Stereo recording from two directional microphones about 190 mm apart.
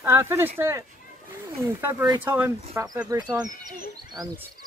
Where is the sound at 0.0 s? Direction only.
10° right (ahead or behind).